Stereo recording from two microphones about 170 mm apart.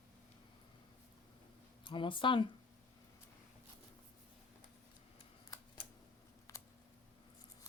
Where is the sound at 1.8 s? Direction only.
30° left (ahead or behind).